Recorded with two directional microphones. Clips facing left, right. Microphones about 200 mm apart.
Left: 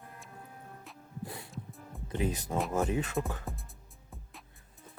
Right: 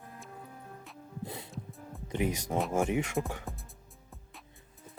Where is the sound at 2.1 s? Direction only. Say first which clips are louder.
Right 1 dB; 15° right (ahead or behind).